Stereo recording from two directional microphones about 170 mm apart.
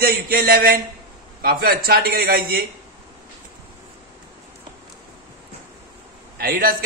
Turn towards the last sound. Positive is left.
turn(degrees=-60)  # may be behind; listen again after turning